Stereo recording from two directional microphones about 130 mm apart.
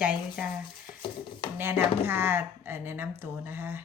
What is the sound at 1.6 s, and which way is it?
Speech, 15° right (ahead or behind).